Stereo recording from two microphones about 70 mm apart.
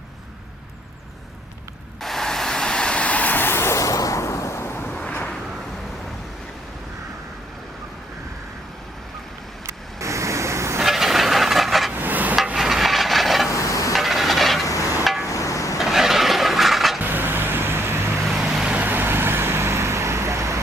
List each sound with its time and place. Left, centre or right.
2.0 s vehicle: centre; by 5.0 s left
5.0 s a sound: centre
9.6 s vehicle: right
10.8 s a sound: centre
11.9 s hammer: right
12.5 s wood: centre
13.6 s stir: left
13.9 s wood: centre
14.6 s hammer: left
15.3 s a sound: left
15.8 s a sound: centre
17.0 s vehicle: right
18.3 s vehicle: centre
18.8 s vehicle: right